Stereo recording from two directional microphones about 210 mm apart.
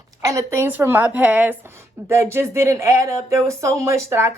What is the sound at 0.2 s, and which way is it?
Speech, 15° right (ahead or behind).